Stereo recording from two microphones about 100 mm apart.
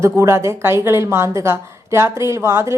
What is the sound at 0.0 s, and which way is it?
A woman's voice, 30° right (ahead or behind).